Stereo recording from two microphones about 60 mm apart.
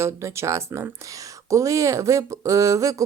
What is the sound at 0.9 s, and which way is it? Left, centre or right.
Speech, right.